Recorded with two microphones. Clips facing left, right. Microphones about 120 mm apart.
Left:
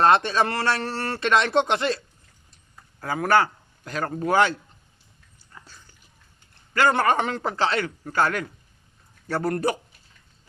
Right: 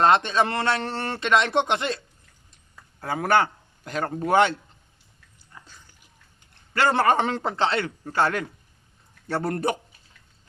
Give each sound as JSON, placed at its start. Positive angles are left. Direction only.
{"t": 0.0, "sound": "a man's voice", "side_deg": -20}
{"t": 3.0, "sound": "a man's voice", "side_deg": -25}
{"t": 6.7, "sound": "a man's voice", "side_deg": -30}